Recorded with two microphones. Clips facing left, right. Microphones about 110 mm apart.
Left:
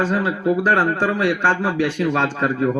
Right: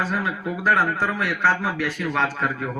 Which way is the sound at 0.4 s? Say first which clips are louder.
Left 4 dB; 20° left (ahead or behind).